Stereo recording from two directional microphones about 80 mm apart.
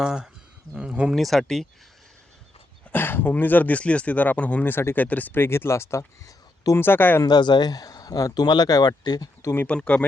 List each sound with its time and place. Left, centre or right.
0.0 s speech: centre
1.1 s speech: centre
2.9 s speech: left
6.7 s speech: left
7.2 s speech: left
9.4 s speech: left
9.6 s speech: centre